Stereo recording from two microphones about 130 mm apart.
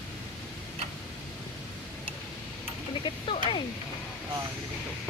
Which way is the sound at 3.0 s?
40° left (ahead or behind).